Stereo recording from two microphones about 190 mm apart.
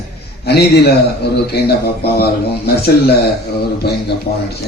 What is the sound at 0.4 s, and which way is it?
Speech, 60° left (ahead or behind).